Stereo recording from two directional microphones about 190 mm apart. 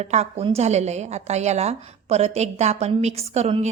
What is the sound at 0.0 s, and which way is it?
A woman's voice, 35° right (ahead or behind).